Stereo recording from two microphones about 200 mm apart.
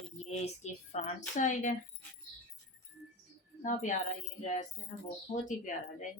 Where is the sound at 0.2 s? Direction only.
35° left (ahead or behind).